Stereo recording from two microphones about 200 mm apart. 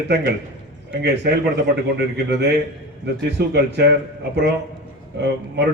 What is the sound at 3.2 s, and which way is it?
Speech, 55° right (ahead or behind).